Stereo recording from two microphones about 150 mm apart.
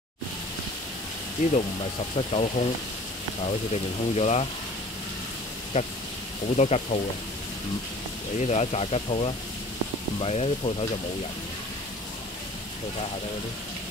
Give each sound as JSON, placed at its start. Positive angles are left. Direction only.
{"t": 2.1, "sound": "speech", "side_deg": 45}
{"t": 5.7, "sound": "speech", "side_deg": 55}
{"t": 8.4, "sound": "speech", "side_deg": 45}